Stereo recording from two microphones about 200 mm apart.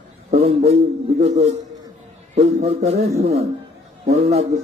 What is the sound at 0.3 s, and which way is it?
A man's voice, 30° right (ahead or behind).